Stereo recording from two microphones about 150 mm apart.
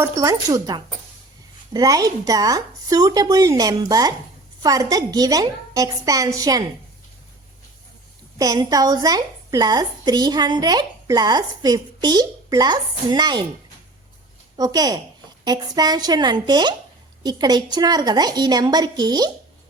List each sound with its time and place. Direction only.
0.0 s a woman's voice: 20° right (ahead or behind)
8.4 s a woman's voice: 25° right (ahead or behind)
14.5 s a woman's voice: 25° right (ahead or behind)